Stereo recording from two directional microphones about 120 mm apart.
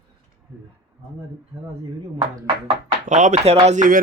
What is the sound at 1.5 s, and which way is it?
Speech, 30° right (ahead or behind).